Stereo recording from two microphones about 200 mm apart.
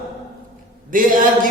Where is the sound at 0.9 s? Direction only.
45° right (ahead or behind).